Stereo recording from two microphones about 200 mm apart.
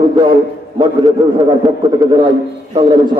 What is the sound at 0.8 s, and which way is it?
A man's voice, 20° right (ahead or behind).